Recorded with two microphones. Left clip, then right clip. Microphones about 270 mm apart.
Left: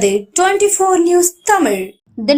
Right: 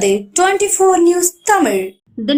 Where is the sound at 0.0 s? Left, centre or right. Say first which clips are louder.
Even; centre.